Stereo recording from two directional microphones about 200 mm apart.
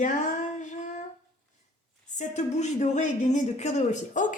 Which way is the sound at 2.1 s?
35° left (ahead or behind).